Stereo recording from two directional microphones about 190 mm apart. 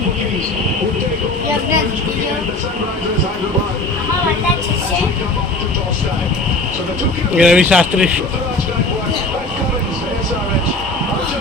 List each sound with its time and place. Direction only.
7.3 s speech: 5° right (ahead or behind)